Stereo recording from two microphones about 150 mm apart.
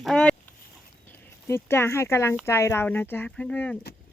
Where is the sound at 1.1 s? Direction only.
15° left (ahead or behind).